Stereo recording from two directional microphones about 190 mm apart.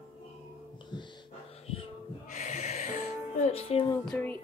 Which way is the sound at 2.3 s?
40° left (ahead or behind).